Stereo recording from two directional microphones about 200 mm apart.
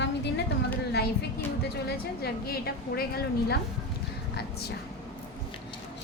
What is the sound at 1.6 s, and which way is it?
A woman's voice, 55° left (ahead or behind).